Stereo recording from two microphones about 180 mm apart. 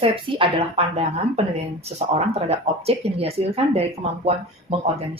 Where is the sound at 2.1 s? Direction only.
35° right (ahead or behind).